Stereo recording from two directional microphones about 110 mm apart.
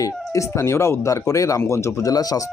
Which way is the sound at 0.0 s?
25° left (ahead or behind).